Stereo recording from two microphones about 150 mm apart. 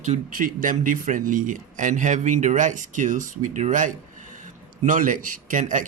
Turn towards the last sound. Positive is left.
turn(degrees=-60)  # may be behind; listen again after turning